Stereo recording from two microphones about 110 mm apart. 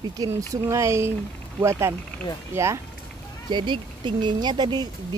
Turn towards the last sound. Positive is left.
turn(degrees=-40)  # may be behind; listen again after turning